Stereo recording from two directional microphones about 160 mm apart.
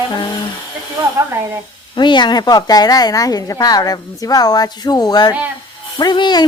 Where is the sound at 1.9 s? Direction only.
30° left (ahead or behind).